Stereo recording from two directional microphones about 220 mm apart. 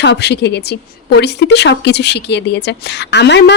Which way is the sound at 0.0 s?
50° left (ahead or behind).